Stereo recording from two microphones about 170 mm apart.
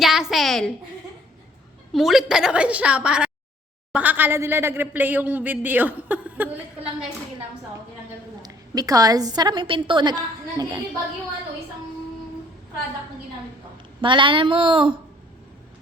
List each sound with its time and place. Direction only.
0.0 s a sound: centre (ahead or behind)
1.9 s a woman's voice: centre (ahead or behind)
8.4 s a woman's voice: 25° right (ahead or behind)
14.0 s speech: 30° right (ahead or behind)